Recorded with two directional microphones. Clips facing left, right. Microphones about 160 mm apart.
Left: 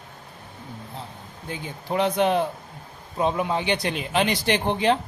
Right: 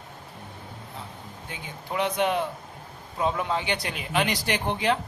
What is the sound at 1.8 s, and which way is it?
Speech, 30° left (ahead or behind).